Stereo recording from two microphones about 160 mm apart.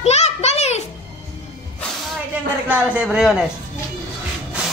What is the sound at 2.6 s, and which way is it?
Speech, 5° right (ahead or behind).